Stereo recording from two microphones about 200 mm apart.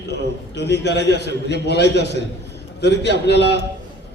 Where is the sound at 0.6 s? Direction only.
55° left (ahead or behind).